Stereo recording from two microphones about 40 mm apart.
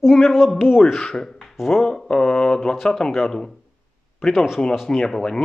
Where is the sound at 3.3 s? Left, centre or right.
Centre.